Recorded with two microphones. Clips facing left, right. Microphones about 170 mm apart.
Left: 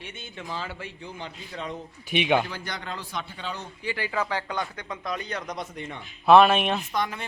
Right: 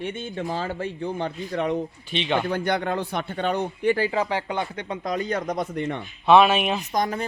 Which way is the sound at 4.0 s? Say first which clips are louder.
Right 5 dB; 30° right (ahead or behind).